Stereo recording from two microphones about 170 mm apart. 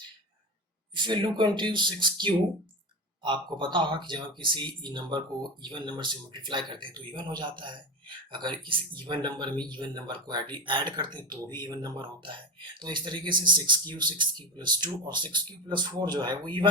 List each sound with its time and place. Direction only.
0.9 s speech: 25° right (ahead or behind)